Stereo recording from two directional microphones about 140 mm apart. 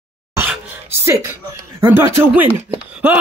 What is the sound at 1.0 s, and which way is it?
A woman's voice, 20° right (ahead or behind).